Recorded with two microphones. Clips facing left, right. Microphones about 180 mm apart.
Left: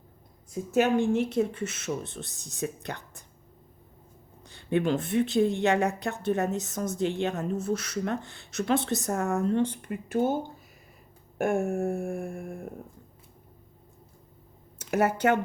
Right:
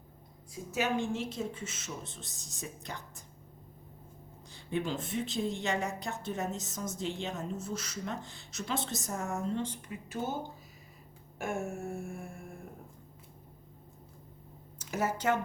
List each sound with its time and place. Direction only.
0.7 s speech: 55° left (ahead or behind)
4.4 s speech: 65° left (ahead or behind)
11.3 s speech: 55° left (ahead or behind)
14.8 s speech: 65° left (ahead or behind)